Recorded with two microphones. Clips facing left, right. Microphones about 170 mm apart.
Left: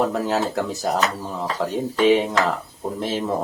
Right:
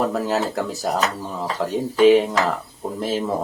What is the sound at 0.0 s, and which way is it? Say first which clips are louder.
Speech: even; centre (ahead or behind).